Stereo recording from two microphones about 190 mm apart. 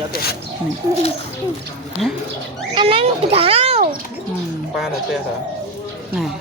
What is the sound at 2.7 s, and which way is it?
A child's voice, 30° right (ahead or behind).